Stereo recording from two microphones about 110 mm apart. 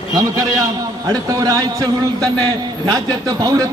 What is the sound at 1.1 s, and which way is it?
A man's voice, 30° right (ahead or behind).